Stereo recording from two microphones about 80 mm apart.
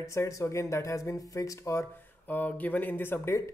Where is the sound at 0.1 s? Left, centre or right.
Left.